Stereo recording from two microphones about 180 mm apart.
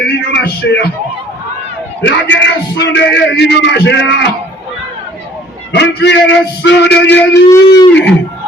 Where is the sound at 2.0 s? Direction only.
85° left.